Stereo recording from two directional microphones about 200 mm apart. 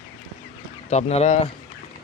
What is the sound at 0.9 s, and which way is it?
Speech, 30° left (ahead or behind).